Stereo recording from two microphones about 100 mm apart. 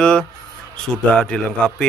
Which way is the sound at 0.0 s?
10° left (ahead or behind).